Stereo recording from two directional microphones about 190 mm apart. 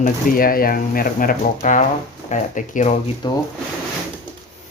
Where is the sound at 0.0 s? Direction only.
50° left (ahead or behind).